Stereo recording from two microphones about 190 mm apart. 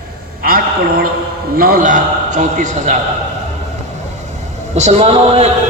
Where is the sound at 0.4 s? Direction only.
50° right (ahead or behind).